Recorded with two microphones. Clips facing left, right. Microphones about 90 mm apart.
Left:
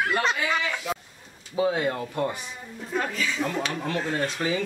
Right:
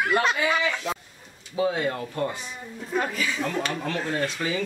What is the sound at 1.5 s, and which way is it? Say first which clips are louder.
Speech: left 1 dB; 20° left (ahead or behind).